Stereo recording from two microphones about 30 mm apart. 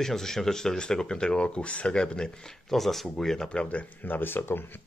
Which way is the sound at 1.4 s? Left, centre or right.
Left.